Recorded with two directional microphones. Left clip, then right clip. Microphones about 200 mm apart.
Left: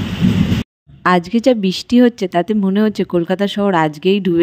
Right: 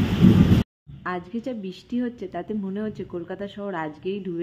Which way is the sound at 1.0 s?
55° left (ahead or behind).